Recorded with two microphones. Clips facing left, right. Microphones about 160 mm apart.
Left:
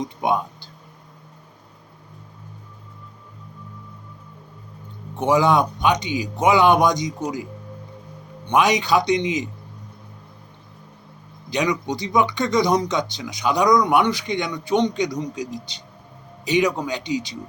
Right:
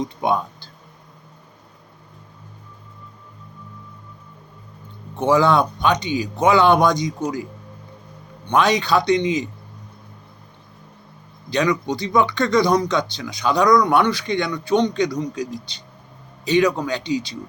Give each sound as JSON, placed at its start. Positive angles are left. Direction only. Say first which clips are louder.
{"t": 0.0, "sound": "speech", "louder": "right 1 dB", "side_deg": 15}
{"t": 5.1, "sound": "speech", "louder": "right 1 dB", "side_deg": 15}
{"t": 8.4, "sound": "speech", "louder": "even", "side_deg": 15}
{"t": 11.5, "sound": "speech", "louder": "right 2 dB", "side_deg": 15}